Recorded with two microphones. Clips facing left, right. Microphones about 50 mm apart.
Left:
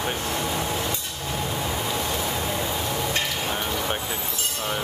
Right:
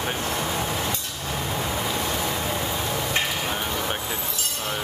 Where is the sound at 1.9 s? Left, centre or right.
Centre.